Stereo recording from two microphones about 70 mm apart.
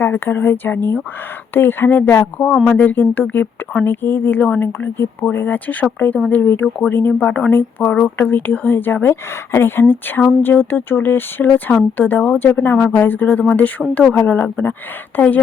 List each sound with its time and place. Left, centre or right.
0.0 s speech: left